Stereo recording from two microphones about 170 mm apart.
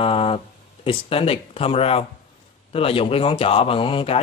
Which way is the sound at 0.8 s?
35° left (ahead or behind).